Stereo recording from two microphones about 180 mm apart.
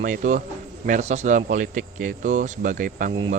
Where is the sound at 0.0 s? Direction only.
45° right (ahead or behind).